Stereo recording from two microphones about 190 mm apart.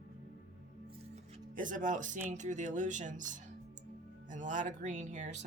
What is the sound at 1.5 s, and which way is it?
Speech, 45° right (ahead or behind).